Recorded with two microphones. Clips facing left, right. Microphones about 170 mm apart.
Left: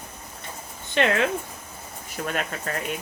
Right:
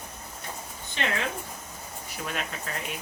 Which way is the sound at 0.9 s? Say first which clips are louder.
Left 9 dB; 65° left (ahead or behind).